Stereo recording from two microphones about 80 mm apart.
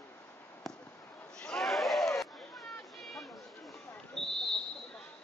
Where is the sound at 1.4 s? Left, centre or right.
Centre.